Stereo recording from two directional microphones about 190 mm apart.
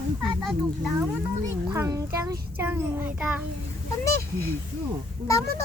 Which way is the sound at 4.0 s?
15° left (ahead or behind).